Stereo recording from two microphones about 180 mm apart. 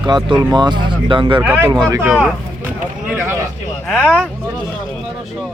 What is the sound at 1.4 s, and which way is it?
Speech, 10° right (ahead or behind).